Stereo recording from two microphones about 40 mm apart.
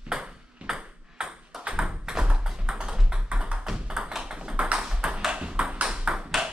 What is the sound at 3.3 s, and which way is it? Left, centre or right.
Tap, right.